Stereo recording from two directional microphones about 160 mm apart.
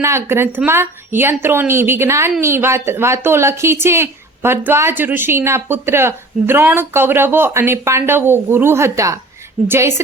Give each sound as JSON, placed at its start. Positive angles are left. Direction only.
{"t": 0.0, "sound": "a woman's voice", "side_deg": -15}